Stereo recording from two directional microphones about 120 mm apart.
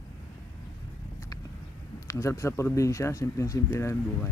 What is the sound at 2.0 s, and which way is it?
Speech, 25° left (ahead or behind).